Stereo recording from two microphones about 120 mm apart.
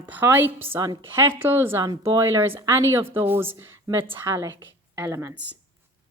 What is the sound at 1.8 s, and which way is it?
Speech, 35° right (ahead or behind).